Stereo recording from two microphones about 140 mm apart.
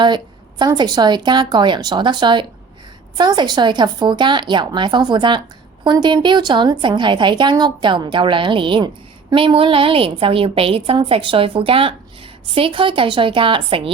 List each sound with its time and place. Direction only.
0.6 s a woman's voice: 30° right (ahead or behind)